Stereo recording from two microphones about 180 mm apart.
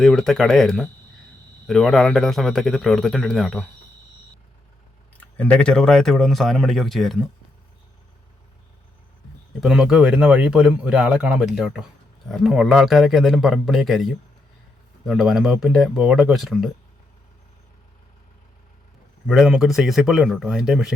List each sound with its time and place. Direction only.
0.0 s speech: centre (ahead or behind)
5.1 s speech: 5° left (ahead or behind)
9.6 s speech: 5° right (ahead or behind)
19.3 s speech: 5° right (ahead or behind)